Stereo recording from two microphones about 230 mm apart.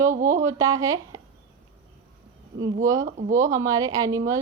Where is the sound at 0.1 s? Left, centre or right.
Right.